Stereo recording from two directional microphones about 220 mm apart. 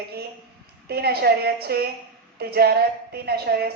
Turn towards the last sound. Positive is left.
turn(degrees=-45)  # may be behind; listen again after turning